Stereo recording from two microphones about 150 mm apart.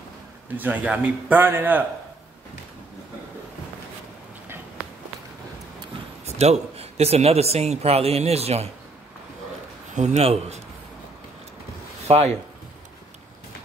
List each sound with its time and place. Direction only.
0.6 s a man's voice: 10° right (ahead or behind)
6.2 s a man's voice: 45° right (ahead or behind)
9.9 s a man's voice: 50° right (ahead or behind)
12.1 s a man's voice: 45° right (ahead or behind)